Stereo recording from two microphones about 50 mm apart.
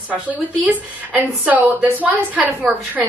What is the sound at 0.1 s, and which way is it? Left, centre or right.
Speech, right.